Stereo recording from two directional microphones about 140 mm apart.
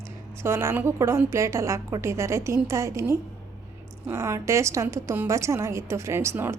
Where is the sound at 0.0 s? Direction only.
20° right (ahead or behind).